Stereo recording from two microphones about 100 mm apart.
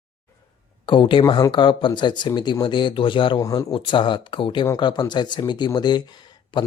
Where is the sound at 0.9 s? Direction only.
55° left (ahead or behind).